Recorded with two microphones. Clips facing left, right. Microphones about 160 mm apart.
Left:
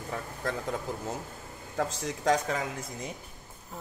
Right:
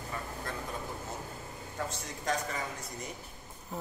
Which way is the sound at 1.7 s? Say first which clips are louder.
Left 8 dB; 90° left.